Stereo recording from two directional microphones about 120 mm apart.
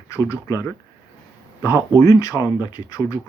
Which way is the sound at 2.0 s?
30° left (ahead or behind).